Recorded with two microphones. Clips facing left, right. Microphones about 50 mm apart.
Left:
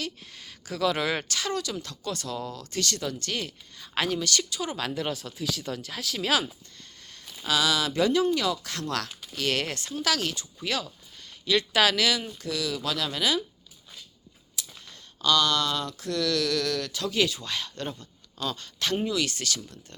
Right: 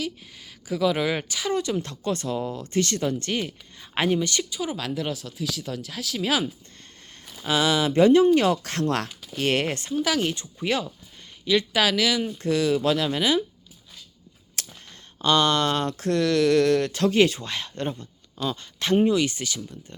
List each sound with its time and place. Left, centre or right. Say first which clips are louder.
0.0 s speech: right 4 dB; centre
1.5 s speech: right 6 dB; right
4.8 s speech: right 1 dB; centre
7.4 s speech: right 3 dB; right
9.9 s speech: right 3 dB; centre
11.4 s speech: right 1 dB; centre
12.4 s speech: right 9 dB; right
14.6 s a sound: right 3 dB; right
15.2 s speech: right 3 dB; right; by 19.8 s centre